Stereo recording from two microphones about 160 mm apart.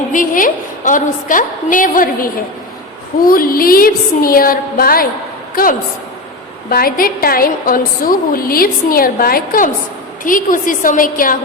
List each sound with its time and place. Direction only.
0.1 s a woman's voice: 55° left (ahead or behind)
6.7 s a woman's voice: 65° left (ahead or behind)